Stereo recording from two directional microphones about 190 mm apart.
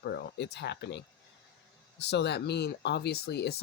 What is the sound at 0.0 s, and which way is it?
Speech, 60° left (ahead or behind).